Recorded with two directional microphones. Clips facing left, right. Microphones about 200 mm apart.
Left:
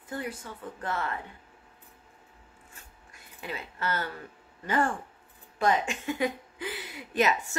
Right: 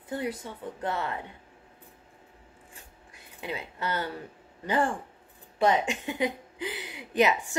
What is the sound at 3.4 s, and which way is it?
A woman's voice, 20° right (ahead or behind).